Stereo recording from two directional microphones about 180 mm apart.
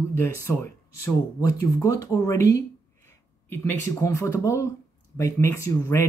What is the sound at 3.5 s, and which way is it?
Speech, 15° left (ahead or behind).